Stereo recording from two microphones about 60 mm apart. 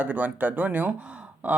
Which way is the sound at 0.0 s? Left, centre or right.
Right.